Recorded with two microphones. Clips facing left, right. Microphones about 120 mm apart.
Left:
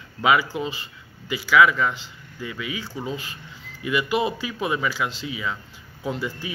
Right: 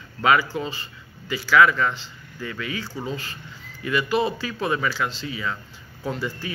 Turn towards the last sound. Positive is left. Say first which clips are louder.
# even
turn(degrees=15)  # may be behind; listen again after turning